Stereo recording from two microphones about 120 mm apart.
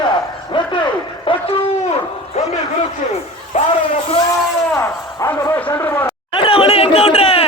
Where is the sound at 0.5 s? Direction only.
45° left (ahead or behind).